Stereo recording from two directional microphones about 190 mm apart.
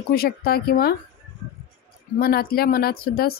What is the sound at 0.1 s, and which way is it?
Speech, 55° left (ahead or behind).